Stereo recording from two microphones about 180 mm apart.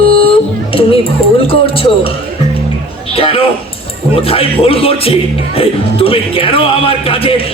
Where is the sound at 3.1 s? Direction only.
30° left (ahead or behind).